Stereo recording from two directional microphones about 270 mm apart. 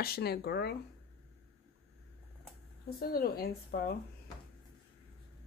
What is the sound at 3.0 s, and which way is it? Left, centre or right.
Speech, left.